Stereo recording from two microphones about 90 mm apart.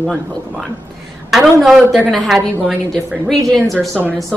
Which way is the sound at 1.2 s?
Centre (ahead or behind).